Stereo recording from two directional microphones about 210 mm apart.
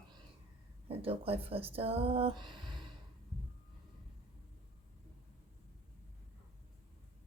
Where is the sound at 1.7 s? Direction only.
25° right (ahead or behind).